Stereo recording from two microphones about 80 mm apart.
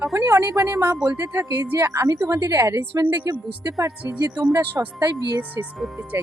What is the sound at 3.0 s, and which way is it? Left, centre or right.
Speech, right.